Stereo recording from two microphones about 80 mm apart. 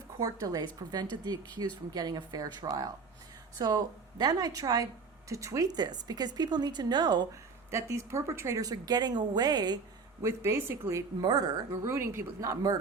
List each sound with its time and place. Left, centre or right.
0.2 s a woman's voice: right
5.3 s speech: right
7.7 s speech: right
8.6 s speech: right
10.2 s speech: right
11.2 s speech: right
11.9 s speech: right
12.4 s a woman's voice: right